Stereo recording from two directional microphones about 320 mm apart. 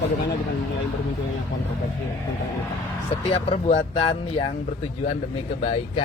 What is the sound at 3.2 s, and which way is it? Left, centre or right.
Speech, centre.